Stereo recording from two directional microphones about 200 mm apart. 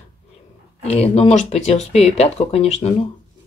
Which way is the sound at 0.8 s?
30° left (ahead or behind).